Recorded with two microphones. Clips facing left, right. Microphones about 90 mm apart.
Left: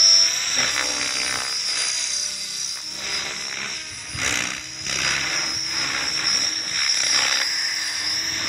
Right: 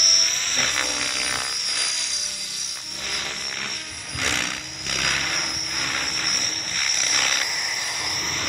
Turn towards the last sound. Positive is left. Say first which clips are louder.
# even
turn(degrees=10)  # may be behind; listen again after turning